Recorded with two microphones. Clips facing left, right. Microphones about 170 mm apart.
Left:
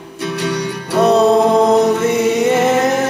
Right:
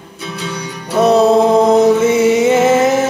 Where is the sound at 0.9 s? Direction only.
Centre (ahead or behind).